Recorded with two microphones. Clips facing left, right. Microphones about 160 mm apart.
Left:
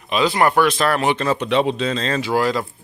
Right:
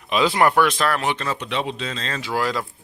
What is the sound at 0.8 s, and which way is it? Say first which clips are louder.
Speech: left 4 dB; 25° left (ahead or behind).